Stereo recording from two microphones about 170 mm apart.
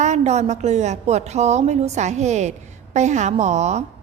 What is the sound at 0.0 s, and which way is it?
A woman's voice, 40° right (ahead or behind).